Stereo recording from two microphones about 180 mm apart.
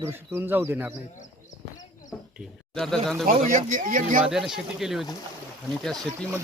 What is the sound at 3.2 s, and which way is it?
Speech, 45° right (ahead or behind).